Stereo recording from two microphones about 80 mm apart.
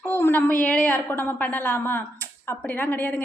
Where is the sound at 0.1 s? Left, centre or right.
Left.